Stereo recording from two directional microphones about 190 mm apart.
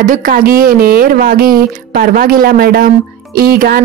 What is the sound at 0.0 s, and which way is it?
Speech, 45° right (ahead or behind).